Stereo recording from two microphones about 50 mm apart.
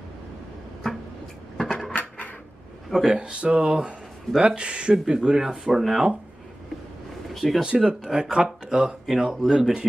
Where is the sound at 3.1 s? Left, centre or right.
Right; by 6.1 s centre.